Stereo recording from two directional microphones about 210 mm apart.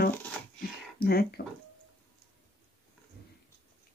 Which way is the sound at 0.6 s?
45° left (ahead or behind).